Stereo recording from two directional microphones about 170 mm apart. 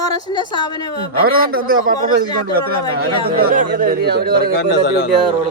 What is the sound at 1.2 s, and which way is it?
A man's voice, 60° right (ahead or behind).